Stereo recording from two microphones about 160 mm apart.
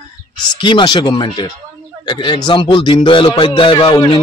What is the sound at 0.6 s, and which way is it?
A man's voice, 30° left (ahead or behind).